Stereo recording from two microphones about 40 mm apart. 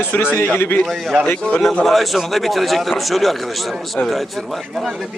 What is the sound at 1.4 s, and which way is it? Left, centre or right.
Speech, left.